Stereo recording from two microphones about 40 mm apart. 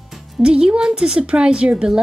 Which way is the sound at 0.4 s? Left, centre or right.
Right.